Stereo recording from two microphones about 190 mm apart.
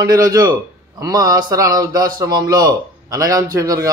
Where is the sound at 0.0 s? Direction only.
15° right (ahead or behind).